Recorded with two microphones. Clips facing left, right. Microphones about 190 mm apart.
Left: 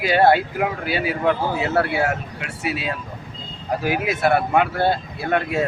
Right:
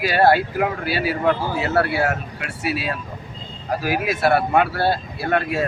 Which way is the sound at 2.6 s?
20° left (ahead or behind).